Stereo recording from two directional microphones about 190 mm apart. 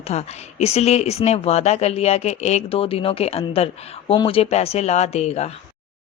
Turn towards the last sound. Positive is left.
turn(degrees=35)  # may be behind; listen again after turning